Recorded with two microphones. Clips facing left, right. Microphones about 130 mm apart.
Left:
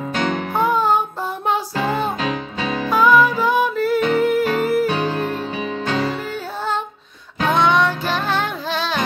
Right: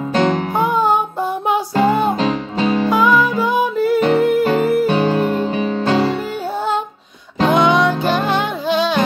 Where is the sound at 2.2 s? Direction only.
35° right (ahead or behind).